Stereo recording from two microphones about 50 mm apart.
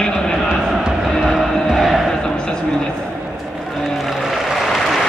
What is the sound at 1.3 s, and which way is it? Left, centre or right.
Music, centre.